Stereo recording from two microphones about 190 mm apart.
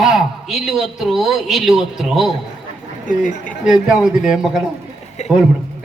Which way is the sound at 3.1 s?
40° left (ahead or behind).